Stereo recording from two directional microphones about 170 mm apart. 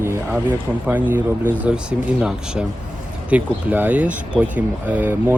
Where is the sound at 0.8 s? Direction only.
10° right (ahead or behind).